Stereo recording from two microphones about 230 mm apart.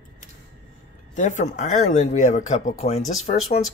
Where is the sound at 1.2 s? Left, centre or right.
Left.